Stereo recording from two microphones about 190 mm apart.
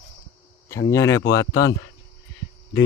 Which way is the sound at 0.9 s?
15° left (ahead or behind).